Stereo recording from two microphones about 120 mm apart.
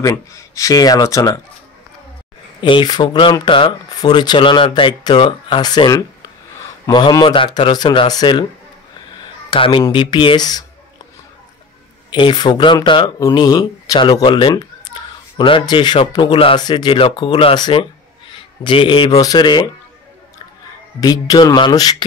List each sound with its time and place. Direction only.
0.0 s speech: 25° left (ahead or behind)
2.6 s speech: 40° left (ahead or behind)
12.1 s speech: 40° left (ahead or behind)
14.9 s a sound: 35° left (ahead or behind)
15.3 s speech: 45° left (ahead or behind)
21.0 s speech: 35° left (ahead or behind)